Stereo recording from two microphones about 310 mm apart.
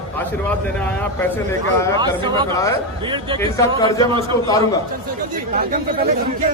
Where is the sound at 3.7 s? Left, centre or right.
Centre.